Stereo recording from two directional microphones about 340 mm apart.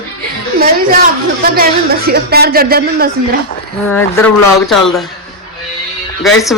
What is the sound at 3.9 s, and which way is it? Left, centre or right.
A man's voice, centre.